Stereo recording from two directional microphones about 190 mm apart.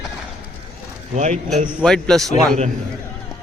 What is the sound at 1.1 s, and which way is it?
Speech, 40° right (ahead or behind).